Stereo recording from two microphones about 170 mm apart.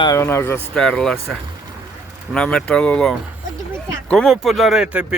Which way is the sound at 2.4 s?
5° left (ahead or behind).